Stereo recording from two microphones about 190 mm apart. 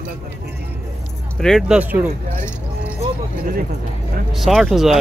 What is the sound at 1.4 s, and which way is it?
Speech, centre (ahead or behind).